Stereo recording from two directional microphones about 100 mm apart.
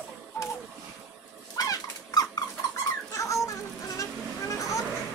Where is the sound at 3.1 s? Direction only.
30° left (ahead or behind).